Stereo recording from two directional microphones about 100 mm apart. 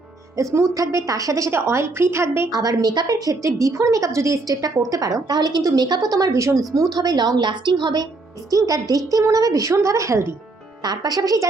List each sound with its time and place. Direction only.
0.3 s a woman's voice: 30° right (ahead or behind)
2.5 s a woman's voice: 40° right (ahead or behind)
8.4 s a woman's voice: 35° right (ahead or behind)
10.8 s a woman's voice: 40° right (ahead or behind)